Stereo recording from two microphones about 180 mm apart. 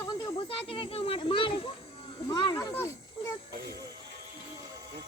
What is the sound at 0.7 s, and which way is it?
Speech, 30° left (ahead or behind).